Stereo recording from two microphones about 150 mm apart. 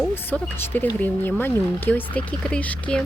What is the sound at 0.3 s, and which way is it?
Speech, 15° left (ahead or behind).